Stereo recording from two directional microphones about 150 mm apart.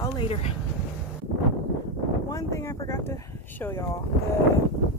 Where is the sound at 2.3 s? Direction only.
20° left (ahead or behind).